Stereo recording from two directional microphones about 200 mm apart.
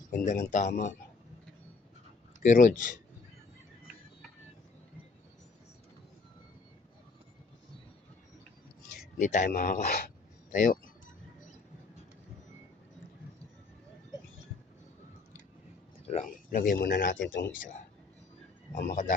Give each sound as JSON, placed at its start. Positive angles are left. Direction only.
{"t": 0.1, "sound": "speech", "side_deg": 40}
{"t": 2.4, "sound": "speech", "side_deg": 40}
{"t": 9.1, "sound": "speech", "side_deg": 40}
{"t": 16.0, "sound": "speech", "side_deg": 35}
{"t": 17.2, "sound": "speech", "side_deg": 65}
{"t": 18.7, "sound": "a man's voice", "side_deg": 45}